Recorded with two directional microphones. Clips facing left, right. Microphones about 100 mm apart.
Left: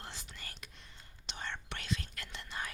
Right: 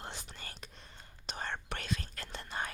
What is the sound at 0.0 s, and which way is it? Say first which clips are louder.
Whispering: right 3 dB; 35° right (ahead or behind).